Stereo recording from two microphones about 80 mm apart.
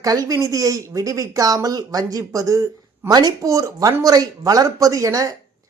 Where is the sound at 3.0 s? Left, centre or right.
Right.